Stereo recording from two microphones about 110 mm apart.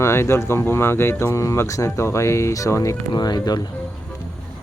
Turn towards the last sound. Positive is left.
turn(degrees=35)  # may be behind; listen again after turning